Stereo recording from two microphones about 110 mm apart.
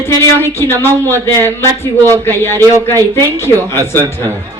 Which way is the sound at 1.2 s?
25° right (ahead or behind).